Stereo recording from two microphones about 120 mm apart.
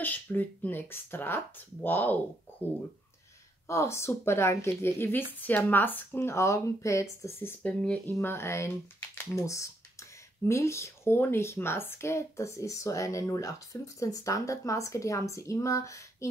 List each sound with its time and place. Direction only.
0.0 s speech: 15° left (ahead or behind)
3.6 s speech: 25° left (ahead or behind)